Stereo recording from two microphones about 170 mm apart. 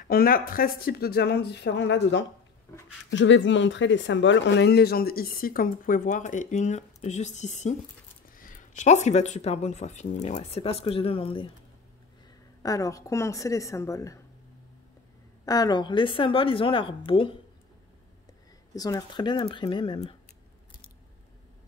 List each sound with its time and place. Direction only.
0.1 s speech: 60° left (ahead or behind); by 11.5 s 30° left (ahead or behind)
12.6 s speech: 20° left (ahead or behind)
15.4 s speech: 20° left (ahead or behind)
18.8 s speech: 20° left (ahead or behind)